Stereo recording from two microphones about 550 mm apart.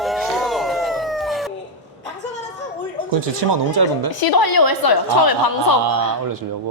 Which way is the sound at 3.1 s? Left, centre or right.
Right.